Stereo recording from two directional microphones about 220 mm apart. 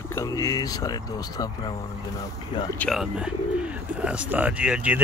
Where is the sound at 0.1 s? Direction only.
15° left (ahead or behind).